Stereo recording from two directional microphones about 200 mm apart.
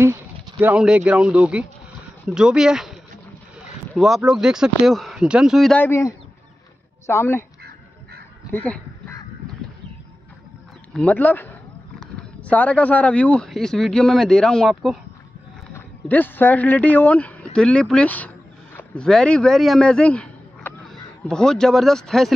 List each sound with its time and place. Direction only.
0.0 s speech: 15° right (ahead or behind); by 7.4 s 10° left (ahead or behind)
8.5 s speech: 5° left (ahead or behind)
10.9 s speech: 5° left (ahead or behind)